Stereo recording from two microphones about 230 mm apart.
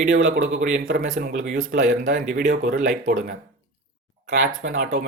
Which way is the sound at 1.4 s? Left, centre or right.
Right.